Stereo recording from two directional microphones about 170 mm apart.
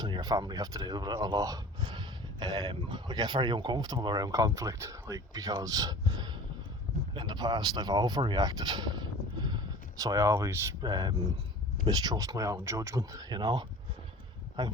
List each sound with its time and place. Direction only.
0.0 s speech: 20° right (ahead or behind)